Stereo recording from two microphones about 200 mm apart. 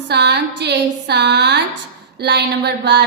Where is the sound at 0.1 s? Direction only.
55° right (ahead or behind).